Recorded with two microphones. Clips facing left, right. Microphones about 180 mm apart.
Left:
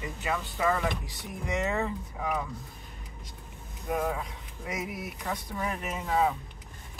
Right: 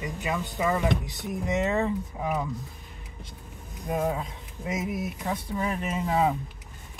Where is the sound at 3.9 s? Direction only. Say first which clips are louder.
Right 2 dB; 25° right (ahead or behind).